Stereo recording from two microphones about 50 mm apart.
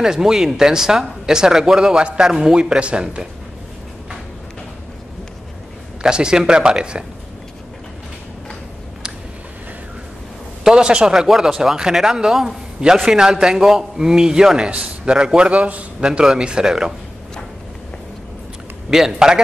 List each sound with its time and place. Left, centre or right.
0.0 s speech: centre
6.0 s speech: centre
10.6 s a man's voice: centre
16.1 s speech: centre
18.9 s speech: centre